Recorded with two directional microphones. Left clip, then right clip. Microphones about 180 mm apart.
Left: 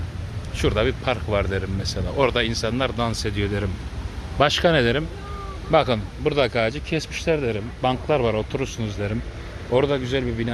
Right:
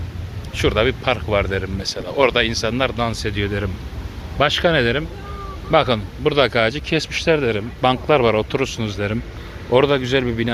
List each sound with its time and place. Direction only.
0.5 s speech: centre (ahead or behind)
5.7 s speech: 5° left (ahead or behind); by 10.5 s 25° right (ahead or behind)